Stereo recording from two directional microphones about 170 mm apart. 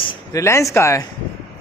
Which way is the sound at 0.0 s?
20° left (ahead or behind).